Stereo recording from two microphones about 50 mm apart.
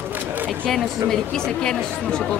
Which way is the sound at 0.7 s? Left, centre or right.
Centre.